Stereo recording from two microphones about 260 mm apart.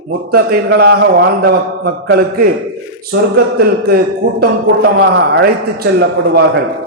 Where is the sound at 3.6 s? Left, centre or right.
Right.